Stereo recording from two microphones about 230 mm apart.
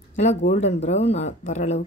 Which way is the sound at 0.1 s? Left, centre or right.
Left.